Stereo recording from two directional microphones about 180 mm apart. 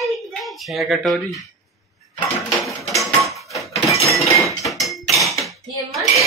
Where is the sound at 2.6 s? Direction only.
Centre (ahead or behind).